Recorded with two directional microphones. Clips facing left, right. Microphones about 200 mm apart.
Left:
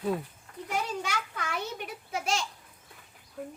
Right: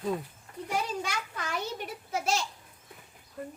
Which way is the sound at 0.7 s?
Centre (ahead or behind).